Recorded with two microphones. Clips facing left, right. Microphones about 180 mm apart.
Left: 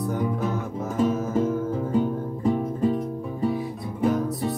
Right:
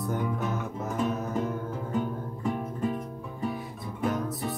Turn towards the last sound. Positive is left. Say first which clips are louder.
# left 6 dB
turn(degrees=0)  # may be behind; listen again after turning